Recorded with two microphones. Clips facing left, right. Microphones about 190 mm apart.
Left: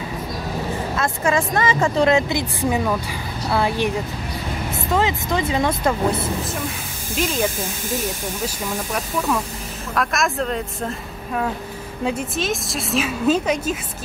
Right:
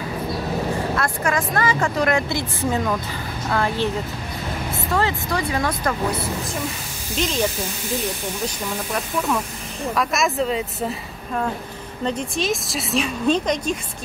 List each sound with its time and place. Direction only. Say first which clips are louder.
0.9 s speech: left 2 dB; 25° left (ahead or behind)
4.9 s speech: left 2 dB; 20° left (ahead or behind)
7.2 s speech: left 1 dB; 5° left (ahead or behind)
9.9 s a woman's voice: even; centre (ahead or behind)